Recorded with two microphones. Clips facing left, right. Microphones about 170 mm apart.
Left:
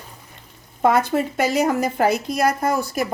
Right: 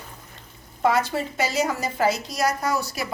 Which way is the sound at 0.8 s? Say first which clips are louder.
Left 4 dB; 55° left (ahead or behind).